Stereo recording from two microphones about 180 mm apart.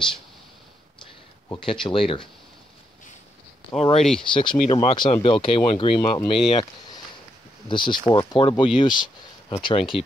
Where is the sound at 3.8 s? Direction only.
35° left (ahead or behind).